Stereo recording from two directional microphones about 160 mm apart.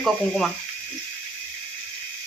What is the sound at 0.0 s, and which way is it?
Speech, centre (ahead or behind).